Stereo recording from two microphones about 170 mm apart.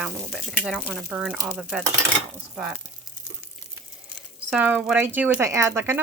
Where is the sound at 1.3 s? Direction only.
15° right (ahead or behind).